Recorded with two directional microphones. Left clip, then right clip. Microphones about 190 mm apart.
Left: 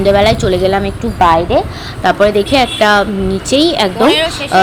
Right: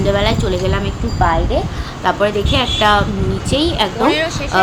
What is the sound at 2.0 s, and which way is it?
Speech, 35° left (ahead or behind).